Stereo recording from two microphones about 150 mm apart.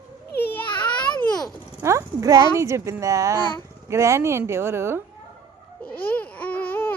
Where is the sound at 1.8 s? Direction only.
20° right (ahead or behind).